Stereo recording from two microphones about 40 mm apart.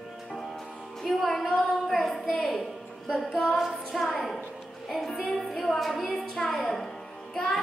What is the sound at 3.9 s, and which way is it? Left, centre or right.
A woman's voice, centre.